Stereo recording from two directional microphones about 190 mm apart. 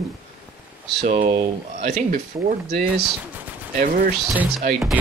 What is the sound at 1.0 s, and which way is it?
Speech, 35° right (ahead or behind).